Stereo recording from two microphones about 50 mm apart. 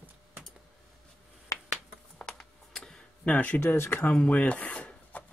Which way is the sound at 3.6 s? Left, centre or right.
Left.